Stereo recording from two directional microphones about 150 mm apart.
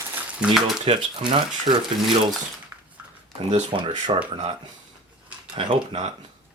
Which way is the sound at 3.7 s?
35° right (ahead or behind).